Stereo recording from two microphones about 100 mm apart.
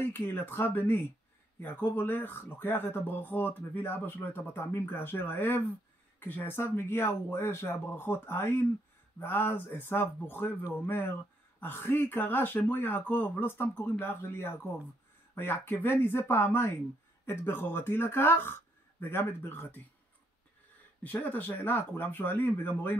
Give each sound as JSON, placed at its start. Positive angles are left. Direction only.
{"t": 0.0, "sound": "speech", "side_deg": 20}
{"t": 21.0, "sound": "speech", "side_deg": 15}